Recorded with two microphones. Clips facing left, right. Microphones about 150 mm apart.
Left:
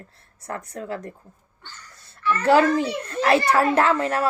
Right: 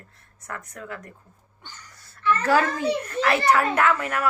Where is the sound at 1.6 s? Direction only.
15° right (ahead or behind).